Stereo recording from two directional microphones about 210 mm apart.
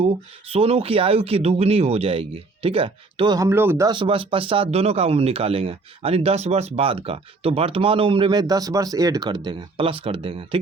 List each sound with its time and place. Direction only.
0.0 s speech: 30° right (ahead or behind)